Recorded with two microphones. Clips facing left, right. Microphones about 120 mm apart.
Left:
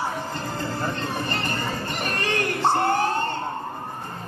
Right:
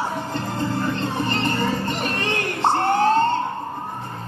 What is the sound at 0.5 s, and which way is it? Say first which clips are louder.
Music: right 5 dB; 25° right (ahead or behind).